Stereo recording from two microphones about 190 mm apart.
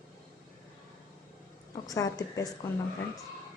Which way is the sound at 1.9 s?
15° left (ahead or behind).